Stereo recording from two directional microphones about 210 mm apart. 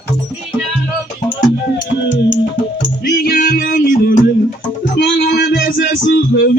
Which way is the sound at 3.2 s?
40° left (ahead or behind).